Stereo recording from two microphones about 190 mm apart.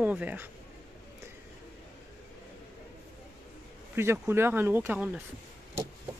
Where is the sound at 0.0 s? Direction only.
10° right (ahead or behind).